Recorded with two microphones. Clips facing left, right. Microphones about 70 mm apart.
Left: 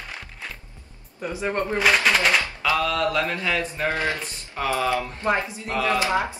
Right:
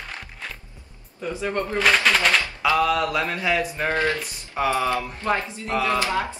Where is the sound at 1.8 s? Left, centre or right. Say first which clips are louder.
Right 1 dB; centre.